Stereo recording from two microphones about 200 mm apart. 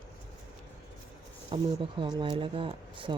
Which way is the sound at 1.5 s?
25° right (ahead or behind).